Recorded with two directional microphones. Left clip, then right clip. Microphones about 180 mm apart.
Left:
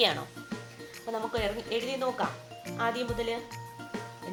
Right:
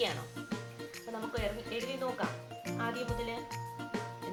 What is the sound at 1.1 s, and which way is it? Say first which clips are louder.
Speech: left 6 dB; 50° left (ahead or behind).